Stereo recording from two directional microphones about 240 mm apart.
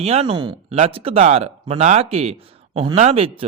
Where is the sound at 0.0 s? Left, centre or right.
Right.